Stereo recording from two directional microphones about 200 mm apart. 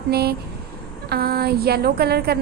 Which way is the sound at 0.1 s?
50° right (ahead or behind).